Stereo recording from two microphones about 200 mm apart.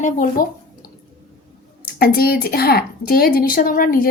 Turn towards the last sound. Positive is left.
turn(degrees=45)  # may be behind; listen again after turning